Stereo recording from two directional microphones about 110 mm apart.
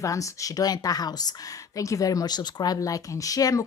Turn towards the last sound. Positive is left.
turn(degrees=30)  # may be behind; listen again after turning